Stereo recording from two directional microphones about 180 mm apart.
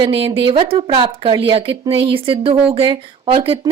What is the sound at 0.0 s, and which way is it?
A woman's voice, 30° right (ahead or behind).